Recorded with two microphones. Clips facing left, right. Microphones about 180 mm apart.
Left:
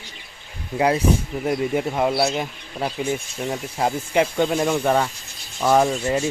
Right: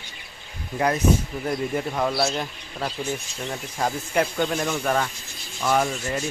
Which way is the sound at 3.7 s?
25° left (ahead or behind).